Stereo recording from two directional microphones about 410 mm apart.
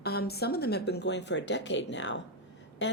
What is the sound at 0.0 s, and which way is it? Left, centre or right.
Speech, left.